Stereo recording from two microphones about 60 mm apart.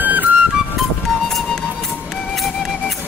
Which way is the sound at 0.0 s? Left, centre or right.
Right.